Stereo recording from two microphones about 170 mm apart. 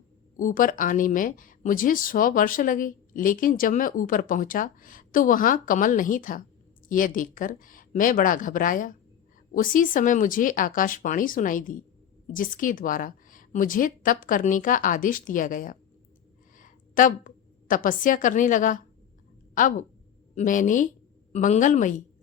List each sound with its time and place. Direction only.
0.3 s a woman's voice: 50° left (ahead or behind)